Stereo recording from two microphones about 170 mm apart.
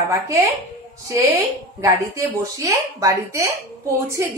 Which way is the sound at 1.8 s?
20° right (ahead or behind).